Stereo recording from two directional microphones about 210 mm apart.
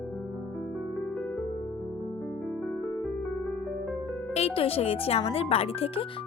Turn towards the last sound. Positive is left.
turn(degrees=25)  # may be behind; listen again after turning